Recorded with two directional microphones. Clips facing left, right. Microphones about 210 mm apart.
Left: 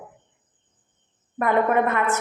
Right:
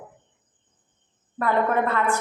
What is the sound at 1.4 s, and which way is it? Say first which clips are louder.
Speech: left 2 dB; 20° left (ahead or behind).